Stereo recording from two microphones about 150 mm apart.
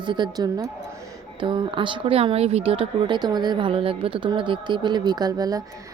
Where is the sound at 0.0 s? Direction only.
30° right (ahead or behind).